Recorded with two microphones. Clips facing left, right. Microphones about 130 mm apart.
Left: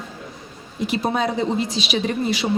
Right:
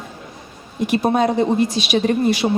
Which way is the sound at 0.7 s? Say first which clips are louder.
Right 5 dB; 50° right (ahead or behind).